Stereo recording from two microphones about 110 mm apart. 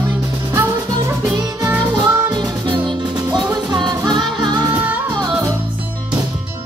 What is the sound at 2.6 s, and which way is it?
Music, 40° right (ahead or behind).